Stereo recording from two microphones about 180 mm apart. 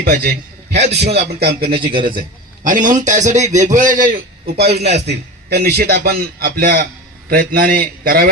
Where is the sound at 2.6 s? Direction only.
45° right (ahead or behind).